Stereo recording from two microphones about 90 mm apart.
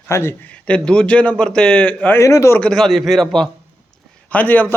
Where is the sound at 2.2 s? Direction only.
35° left (ahead or behind).